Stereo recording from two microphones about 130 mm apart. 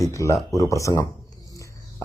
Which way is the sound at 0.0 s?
25° left (ahead or behind).